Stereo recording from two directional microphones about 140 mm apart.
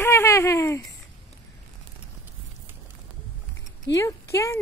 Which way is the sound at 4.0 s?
20° left (ahead or behind).